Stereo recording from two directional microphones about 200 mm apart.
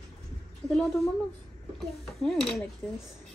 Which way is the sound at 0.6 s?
5° left (ahead or behind).